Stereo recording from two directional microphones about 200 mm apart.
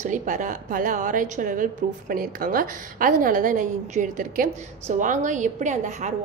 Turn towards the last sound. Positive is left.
turn(degrees=-35)  # may be behind; listen again after turning